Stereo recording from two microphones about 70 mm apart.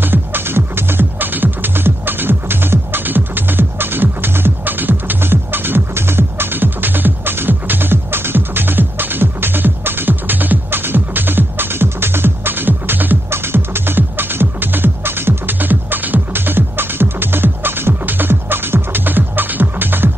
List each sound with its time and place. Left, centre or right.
0.0 s music: right